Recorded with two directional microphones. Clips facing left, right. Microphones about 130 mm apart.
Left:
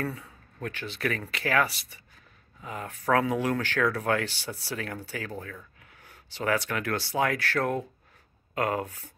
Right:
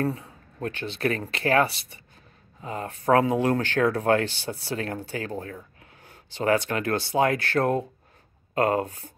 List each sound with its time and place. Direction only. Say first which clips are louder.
0.0 s speech: right 6 dB; 30° right (ahead or behind)